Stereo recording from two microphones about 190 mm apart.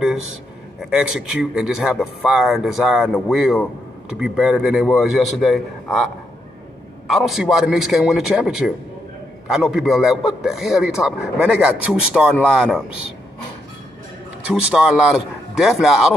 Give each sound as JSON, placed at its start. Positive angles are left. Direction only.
{"t": 0.8, "sound": "a man's voice", "side_deg": -5}
{"t": 7.1, "sound": "a man's voice", "side_deg": 0}
{"t": 14.5, "sound": "a man's voice", "side_deg": -5}